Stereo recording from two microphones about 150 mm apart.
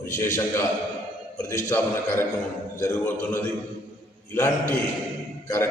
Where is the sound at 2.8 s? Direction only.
15° left (ahead or behind).